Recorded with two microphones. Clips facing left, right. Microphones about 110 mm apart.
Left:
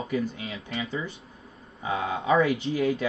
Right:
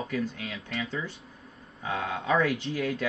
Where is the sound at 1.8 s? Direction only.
10° left (ahead or behind).